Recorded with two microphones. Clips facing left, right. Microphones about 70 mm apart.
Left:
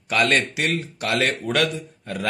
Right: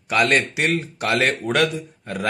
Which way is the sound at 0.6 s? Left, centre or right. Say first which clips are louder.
Right 3 dB; right.